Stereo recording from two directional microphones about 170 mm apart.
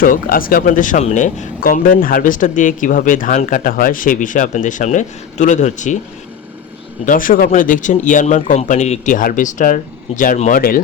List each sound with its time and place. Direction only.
0.0 s speech: 55° left (ahead or behind)
7.0 s speech: 50° left (ahead or behind)